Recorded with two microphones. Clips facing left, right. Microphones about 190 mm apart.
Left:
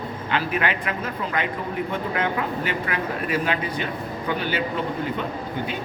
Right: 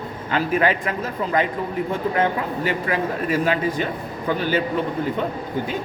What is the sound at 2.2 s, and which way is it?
A man's voice, 40° right (ahead or behind).